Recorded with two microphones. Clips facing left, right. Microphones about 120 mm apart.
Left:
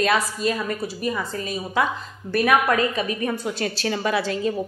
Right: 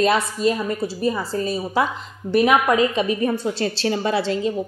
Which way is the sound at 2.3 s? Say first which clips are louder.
Right 3 dB; 20° right (ahead or behind).